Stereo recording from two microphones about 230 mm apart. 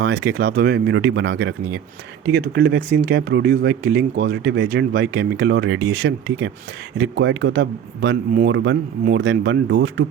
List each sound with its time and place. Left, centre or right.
0.0 s speech: right